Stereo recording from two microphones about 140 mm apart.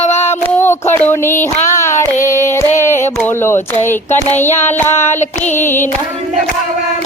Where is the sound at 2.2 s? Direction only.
20° left (ahead or behind).